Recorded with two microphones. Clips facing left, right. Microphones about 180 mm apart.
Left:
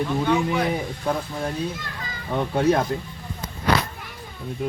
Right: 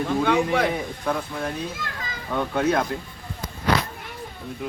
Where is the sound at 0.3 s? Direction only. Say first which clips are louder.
Right 1 dB; 90° right.